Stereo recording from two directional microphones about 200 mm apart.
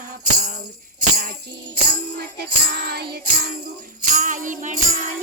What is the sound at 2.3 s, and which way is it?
Music, 55° right (ahead or behind).